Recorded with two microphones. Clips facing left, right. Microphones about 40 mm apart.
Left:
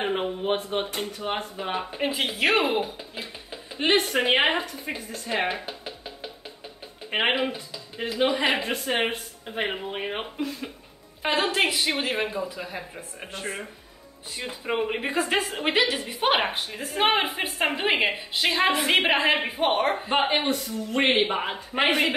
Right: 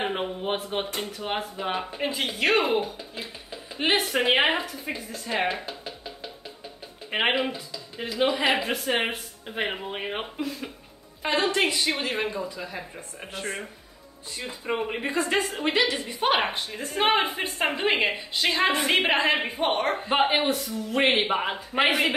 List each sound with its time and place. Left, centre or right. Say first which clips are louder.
0.0 s a woman's voice: left 2 dB; centre
3.7 s a woman's voice: left 2 dB; centre
4.7 s music: even; centre
7.1 s a woman's voice: even; centre
11.2 s speech: even; centre
14.3 s speech: left 1 dB; centre
15.5 s a woman's voice: left 1 dB; left
15.8 s a woman's voice: left 1 dB; centre